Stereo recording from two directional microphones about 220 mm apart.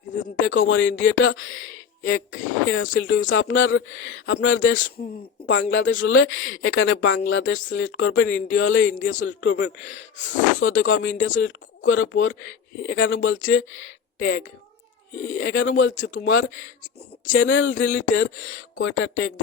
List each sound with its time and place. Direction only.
0.5 s a woman's voice: 60° left (ahead or behind)